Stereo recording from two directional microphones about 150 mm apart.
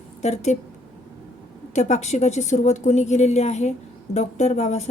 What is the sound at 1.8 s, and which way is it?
A woman's voice, 50° left (ahead or behind).